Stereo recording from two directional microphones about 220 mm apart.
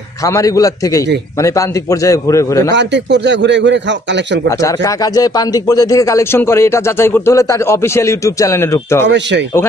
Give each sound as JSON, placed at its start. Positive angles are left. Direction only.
{"t": 0.3, "sound": "speech", "side_deg": 15}
{"t": 2.7, "sound": "speech", "side_deg": -50}
{"t": 4.5, "sound": "speech", "side_deg": 15}
{"t": 9.0, "sound": "speech", "side_deg": -55}